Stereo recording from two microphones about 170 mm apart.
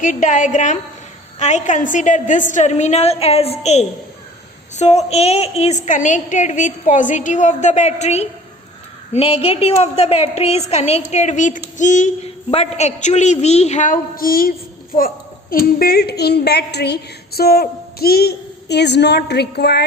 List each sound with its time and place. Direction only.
0.0 s a woman's voice: 50° left (ahead or behind); by 19.8 s 75° left (ahead or behind)